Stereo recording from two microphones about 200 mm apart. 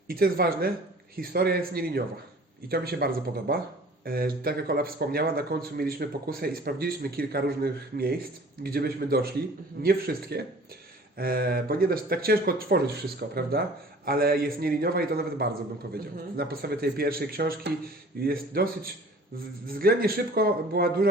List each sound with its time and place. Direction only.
0.1 s speech: 50° right (ahead or behind)